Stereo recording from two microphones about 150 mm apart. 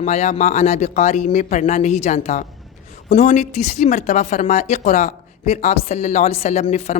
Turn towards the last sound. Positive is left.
turn(degrees=45)  # may be behind; listen again after turning